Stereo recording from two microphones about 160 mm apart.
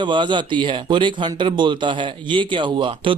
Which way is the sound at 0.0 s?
30° right (ahead or behind).